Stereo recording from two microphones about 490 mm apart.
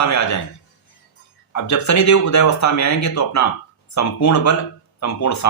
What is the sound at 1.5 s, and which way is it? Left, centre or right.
Speech, left.